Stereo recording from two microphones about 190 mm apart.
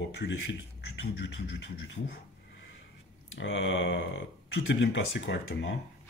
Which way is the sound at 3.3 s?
80° left.